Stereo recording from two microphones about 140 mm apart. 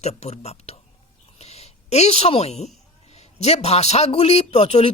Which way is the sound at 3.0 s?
50° left (ahead or behind).